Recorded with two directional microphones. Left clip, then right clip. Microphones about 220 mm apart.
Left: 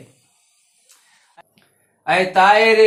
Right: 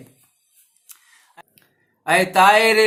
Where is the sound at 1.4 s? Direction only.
45° right (ahead or behind).